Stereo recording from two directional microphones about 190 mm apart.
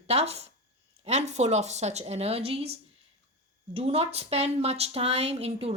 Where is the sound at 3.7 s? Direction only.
35° right (ahead or behind).